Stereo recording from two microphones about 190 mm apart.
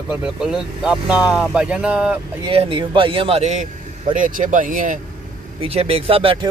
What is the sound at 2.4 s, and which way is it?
A man's voice, 25° right (ahead or behind).